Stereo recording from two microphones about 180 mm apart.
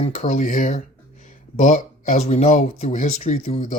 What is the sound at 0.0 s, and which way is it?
Speech, 40° left (ahead or behind).